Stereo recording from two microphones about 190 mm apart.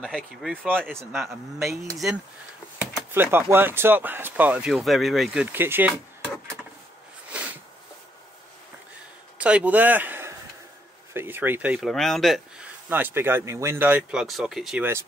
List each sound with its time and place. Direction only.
0.0 s speech: centre (ahead or behind)
1.7 s speech: 15° right (ahead or behind)
9.4 s a man's voice: 5° right (ahead or behind)
12.9 s speech: 10° right (ahead or behind)